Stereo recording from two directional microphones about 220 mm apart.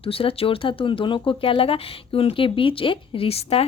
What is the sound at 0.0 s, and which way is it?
Speech, 25° left (ahead or behind).